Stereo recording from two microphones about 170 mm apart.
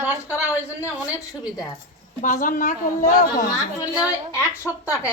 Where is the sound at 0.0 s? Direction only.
10° right (ahead or behind).